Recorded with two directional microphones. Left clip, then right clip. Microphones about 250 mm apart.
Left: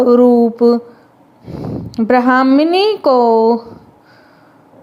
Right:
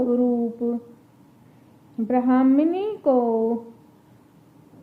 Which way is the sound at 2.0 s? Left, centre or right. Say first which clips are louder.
Left 10 dB; left.